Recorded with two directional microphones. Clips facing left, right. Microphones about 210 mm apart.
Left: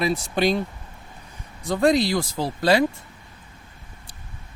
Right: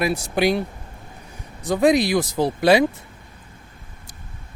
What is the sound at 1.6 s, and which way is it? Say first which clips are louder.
Speech: right 2 dB; 15° right (ahead or behind).